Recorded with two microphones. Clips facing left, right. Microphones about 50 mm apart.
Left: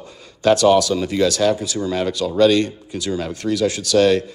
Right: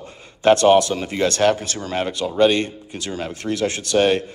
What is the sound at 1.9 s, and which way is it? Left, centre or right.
Speech, right.